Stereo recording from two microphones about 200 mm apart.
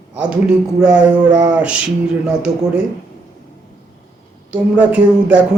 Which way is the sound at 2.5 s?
20° right (ahead or behind).